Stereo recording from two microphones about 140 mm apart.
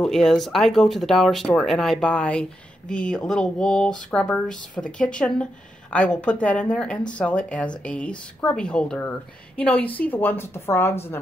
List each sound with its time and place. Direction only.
0.0 s speech: 5° left (ahead or behind)